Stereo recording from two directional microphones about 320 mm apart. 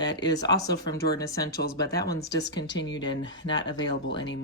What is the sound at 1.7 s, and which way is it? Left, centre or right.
Speech, centre.